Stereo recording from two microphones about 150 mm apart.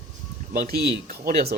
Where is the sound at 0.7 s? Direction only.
80° right.